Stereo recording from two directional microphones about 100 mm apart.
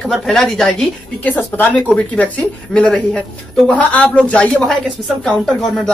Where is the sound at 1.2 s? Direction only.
15° left (ahead or behind).